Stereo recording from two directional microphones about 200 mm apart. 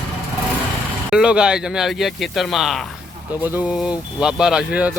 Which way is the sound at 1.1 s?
5° right (ahead or behind).